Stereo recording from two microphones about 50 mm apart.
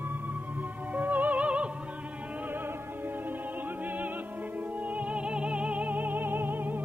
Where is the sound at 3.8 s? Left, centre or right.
Right.